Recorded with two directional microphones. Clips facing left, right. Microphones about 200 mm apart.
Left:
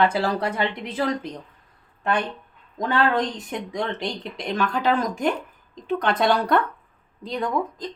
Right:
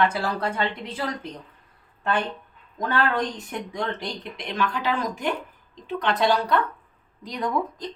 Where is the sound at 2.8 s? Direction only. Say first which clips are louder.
Left 2 dB; 20° left (ahead or behind).